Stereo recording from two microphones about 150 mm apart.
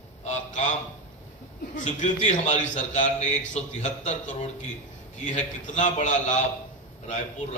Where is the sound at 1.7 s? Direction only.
55° left (ahead or behind).